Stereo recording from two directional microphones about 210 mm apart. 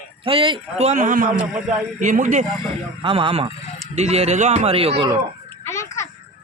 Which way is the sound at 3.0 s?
25° right (ahead or behind).